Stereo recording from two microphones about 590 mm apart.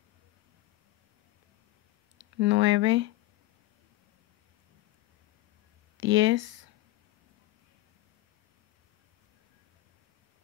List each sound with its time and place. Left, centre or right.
2.1 s speech: centre
5.9 s speech: centre